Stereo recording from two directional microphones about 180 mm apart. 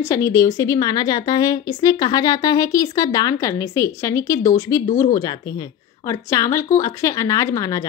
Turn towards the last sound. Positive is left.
turn(degrees=20)  # may be behind; listen again after turning